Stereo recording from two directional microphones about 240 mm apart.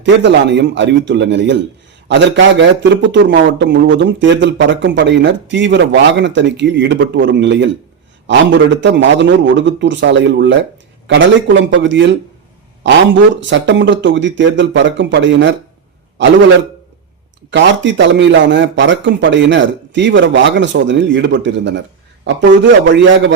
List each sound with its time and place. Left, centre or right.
0.0 s a man's voice: right
13.3 s a man's voice: right
17.5 s a man's voice: right